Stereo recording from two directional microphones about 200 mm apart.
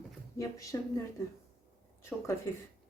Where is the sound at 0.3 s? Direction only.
15° left (ahead or behind).